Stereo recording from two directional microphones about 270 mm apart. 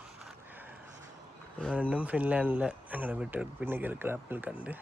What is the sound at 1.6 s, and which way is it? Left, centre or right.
Speech, centre.